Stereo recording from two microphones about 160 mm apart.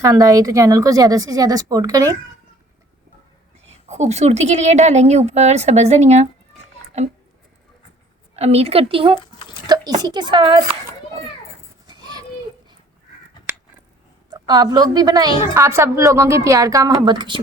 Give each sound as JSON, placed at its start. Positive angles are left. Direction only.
{"t": 0.0, "sound": "a woman's voice", "side_deg": -20}
{"t": 3.8, "sound": "speech", "side_deg": -45}
{"t": 8.4, "sound": "speech", "side_deg": -40}
{"t": 9.2, "sound": "a sound", "side_deg": 30}
{"t": 9.6, "sound": "a woman's voice", "side_deg": -25}
{"t": 11.9, "sound": "children playing", "side_deg": -25}
{"t": 14.3, "sound": "a woman's voice", "side_deg": -25}